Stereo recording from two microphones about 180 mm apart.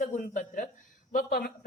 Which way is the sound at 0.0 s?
50° left (ahead or behind).